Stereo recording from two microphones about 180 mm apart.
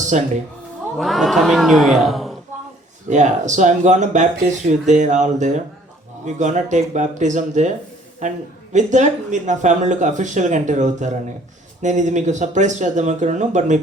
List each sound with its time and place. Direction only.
0.1 s speech: 40° right (ahead or behind)
0.9 s speech: centre (ahead or behind)
3.1 s speech: 40° right (ahead or behind)